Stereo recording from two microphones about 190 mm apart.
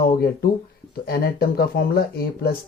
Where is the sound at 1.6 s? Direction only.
50° left (ahead or behind).